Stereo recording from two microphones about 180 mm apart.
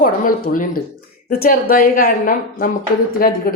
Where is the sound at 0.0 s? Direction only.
50° left (ahead or behind).